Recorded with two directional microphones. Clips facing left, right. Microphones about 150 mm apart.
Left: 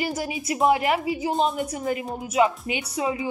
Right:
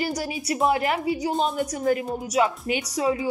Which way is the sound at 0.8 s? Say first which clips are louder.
Even; 40° right (ahead or behind).